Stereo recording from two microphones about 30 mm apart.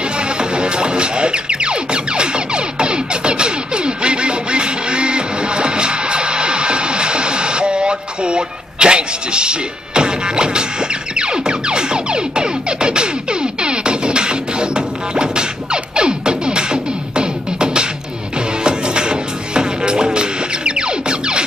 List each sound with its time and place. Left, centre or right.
0.0 s music: right